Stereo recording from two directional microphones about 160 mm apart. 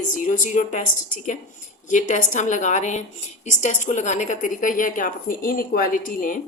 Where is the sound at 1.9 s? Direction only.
50° left (ahead or behind).